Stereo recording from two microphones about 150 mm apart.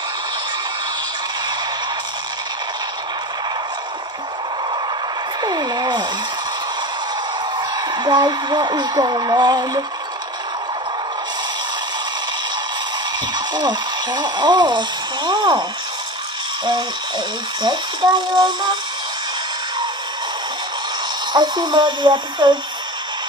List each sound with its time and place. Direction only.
5.4 s a sound: 25° right (ahead or behind)
7.7 s speech: 30° right (ahead or behind)
13.3 s speech: 30° right (ahead or behind)
17.6 s speech: 30° right (ahead or behind)
21.3 s speech: 30° right (ahead or behind)